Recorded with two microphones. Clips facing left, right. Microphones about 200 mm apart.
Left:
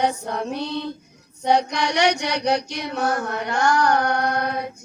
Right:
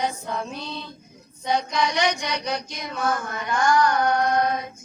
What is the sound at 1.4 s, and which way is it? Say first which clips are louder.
Child singing: left 4 dB; 70° left (ahead or behind).